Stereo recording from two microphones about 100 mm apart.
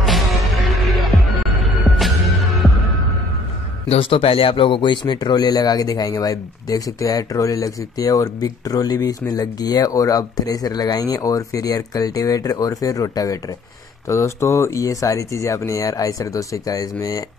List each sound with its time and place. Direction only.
0.0 s music: centre (ahead or behind)
3.9 s speech: 75° left (ahead or behind); by 17.2 s 35° left (ahead or behind)